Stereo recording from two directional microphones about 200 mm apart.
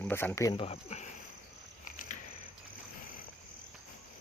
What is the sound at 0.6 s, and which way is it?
Speech, 30° left (ahead or behind).